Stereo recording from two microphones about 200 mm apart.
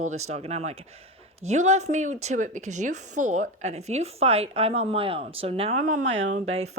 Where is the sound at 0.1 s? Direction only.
35° right (ahead or behind).